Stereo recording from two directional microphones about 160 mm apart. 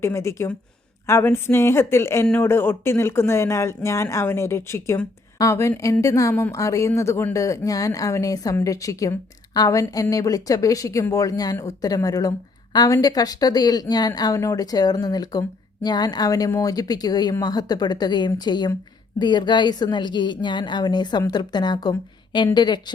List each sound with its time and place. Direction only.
0.0 s speech: 15° left (ahead or behind)